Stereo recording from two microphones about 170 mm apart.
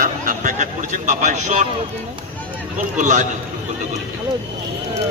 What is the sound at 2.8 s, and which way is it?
Speech, 45° right (ahead or behind).